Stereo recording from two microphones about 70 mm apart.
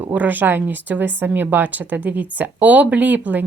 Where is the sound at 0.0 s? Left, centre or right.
Right.